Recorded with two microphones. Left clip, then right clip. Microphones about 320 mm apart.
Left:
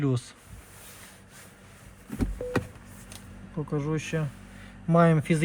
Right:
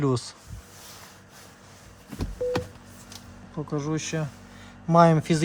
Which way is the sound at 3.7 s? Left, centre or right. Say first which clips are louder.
Right 1 dB; centre.